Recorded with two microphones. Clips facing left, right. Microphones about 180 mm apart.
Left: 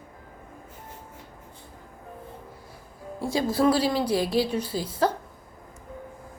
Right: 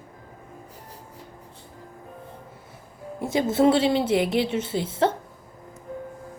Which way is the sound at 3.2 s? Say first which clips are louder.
Right 3 dB; 20° right (ahead or behind).